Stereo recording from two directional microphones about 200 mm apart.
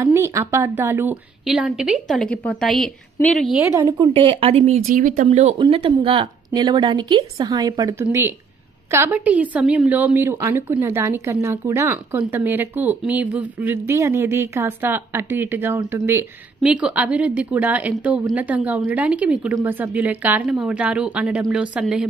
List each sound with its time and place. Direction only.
0.0 s a woman's voice: 15° right (ahead or behind); by 3.4 s 5° left (ahead or behind)
3.8 s a woman's voice: 25° right (ahead or behind); by 22.0 s 5° right (ahead or behind)